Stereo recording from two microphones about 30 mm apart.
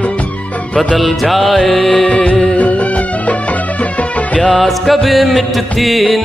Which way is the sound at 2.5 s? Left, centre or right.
Left.